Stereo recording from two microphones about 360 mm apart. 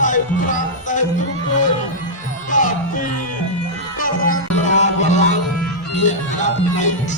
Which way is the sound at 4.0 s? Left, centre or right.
Left.